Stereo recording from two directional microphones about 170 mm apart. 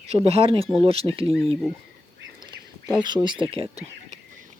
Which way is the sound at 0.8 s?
35° right (ahead or behind).